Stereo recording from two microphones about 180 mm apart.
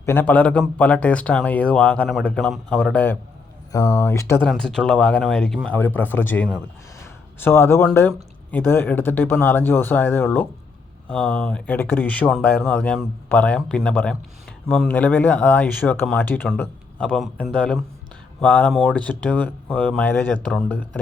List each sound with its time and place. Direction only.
0.0 s speech: 10° left (ahead or behind)
3.7 s speech: 20° left (ahead or behind)
4.4 s speech: 5° left (ahead or behind)